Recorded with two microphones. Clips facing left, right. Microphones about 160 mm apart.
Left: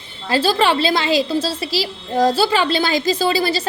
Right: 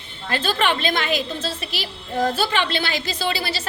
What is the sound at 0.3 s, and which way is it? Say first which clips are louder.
A woman's voice: left 5 dB; 30° left (ahead or behind).